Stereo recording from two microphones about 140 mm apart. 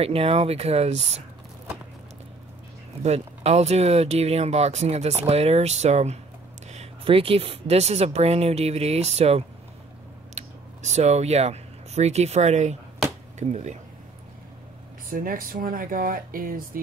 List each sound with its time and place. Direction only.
0.0 s speech: 45° right (ahead or behind)
3.0 s speech: 50° right (ahead or behind)
15.0 s speech: 85° right